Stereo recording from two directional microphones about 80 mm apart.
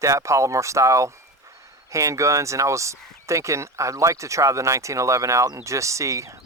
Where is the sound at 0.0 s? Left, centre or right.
Right.